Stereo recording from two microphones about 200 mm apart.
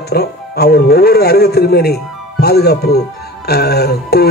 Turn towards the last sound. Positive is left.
turn(degrees=50)  # may be behind; listen again after turning